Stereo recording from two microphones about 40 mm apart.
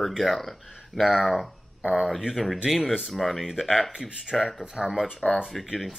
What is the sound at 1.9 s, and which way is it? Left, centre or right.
Speech, centre.